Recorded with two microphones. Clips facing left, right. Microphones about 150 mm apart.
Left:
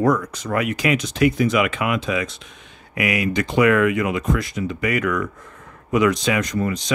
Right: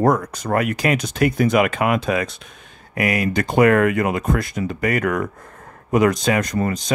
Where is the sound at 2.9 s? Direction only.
40° right (ahead or behind).